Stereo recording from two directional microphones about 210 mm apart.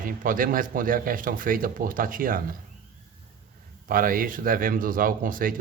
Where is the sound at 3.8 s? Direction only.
40° right (ahead or behind).